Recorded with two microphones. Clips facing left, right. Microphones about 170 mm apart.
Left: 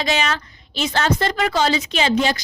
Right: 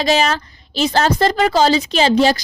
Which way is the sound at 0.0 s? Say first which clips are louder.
Right 5 dB; 35° right (ahead or behind).